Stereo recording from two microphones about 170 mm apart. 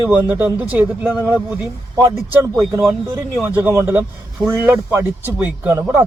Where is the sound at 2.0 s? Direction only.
15° right (ahead or behind).